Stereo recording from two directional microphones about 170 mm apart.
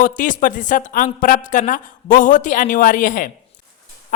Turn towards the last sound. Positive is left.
turn(degrees=50)  # may be behind; listen again after turning